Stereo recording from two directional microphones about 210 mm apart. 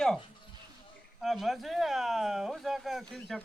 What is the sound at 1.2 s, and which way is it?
Speech, centre (ahead or behind).